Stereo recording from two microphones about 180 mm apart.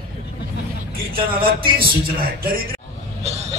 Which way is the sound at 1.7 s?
55° right (ahead or behind).